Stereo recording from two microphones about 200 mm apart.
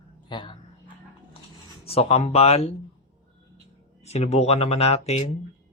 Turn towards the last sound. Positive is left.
turn(degrees=35)  # may be behind; listen again after turning